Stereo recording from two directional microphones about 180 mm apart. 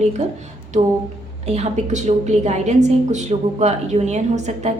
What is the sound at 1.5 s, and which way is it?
A woman's voice, 40° right (ahead or behind).